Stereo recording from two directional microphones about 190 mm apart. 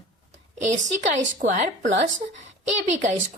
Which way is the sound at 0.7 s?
40° right (ahead or behind).